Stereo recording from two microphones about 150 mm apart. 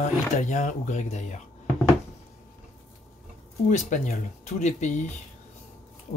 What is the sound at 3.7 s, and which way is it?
Speech, 55° left (ahead or behind).